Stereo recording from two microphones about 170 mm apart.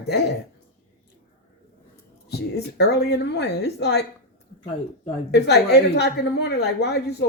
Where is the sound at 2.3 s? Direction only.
75° left (ahead or behind).